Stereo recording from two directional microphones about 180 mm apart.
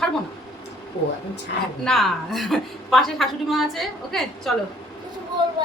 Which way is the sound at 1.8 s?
Centre (ahead or behind).